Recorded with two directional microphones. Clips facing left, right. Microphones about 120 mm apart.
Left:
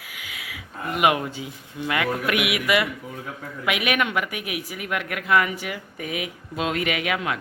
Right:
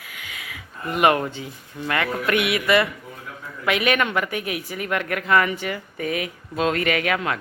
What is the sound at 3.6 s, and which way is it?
Speech, 10° left (ahead or behind).